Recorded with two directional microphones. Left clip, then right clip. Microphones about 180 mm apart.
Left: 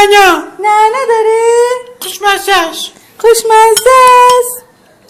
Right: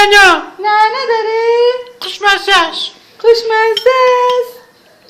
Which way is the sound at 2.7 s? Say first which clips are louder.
Even; 40° left (ahead or behind).